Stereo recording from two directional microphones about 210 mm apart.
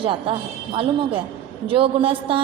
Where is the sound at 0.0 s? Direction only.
25° right (ahead or behind).